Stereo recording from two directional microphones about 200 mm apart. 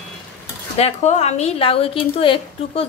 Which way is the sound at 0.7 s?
35° left (ahead or behind).